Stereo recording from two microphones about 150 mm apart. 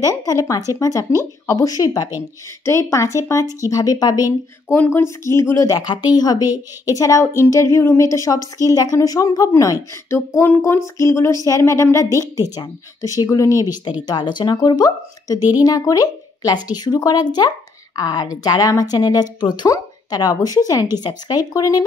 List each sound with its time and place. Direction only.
0.0 s speech: 20° left (ahead or behind)